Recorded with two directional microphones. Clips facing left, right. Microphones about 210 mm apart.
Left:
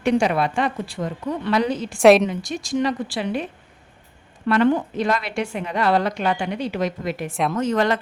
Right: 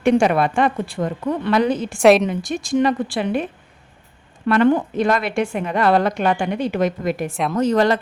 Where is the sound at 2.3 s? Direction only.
55° right (ahead or behind).